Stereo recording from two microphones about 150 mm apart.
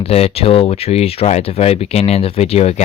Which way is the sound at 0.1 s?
40° left (ahead or behind).